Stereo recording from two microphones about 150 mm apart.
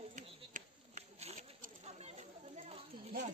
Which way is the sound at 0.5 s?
50° right (ahead or behind).